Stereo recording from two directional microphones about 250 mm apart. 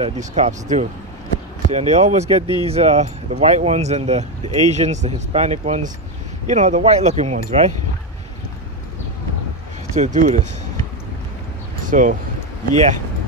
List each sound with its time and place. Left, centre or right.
0.0 s speech: right
9.9 s speech: right
11.8 s speech: right